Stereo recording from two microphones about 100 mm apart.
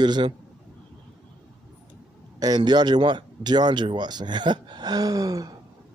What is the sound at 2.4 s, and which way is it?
Speech, 45° right (ahead or behind).